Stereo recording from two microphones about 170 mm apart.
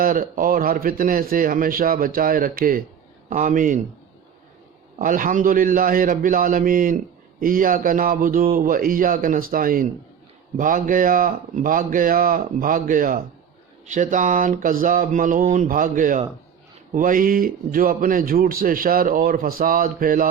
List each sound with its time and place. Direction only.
0.0 s a man's voice: 55° right (ahead or behind)
4.9 s a man's voice: 50° right (ahead or behind)